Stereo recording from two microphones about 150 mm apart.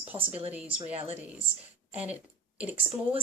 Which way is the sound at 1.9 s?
10° right (ahead or behind).